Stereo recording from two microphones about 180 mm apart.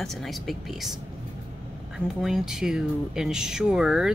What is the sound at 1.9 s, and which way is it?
A woman's voice, centre (ahead or behind).